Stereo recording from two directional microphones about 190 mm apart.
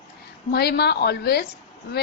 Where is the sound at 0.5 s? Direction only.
60° left (ahead or behind).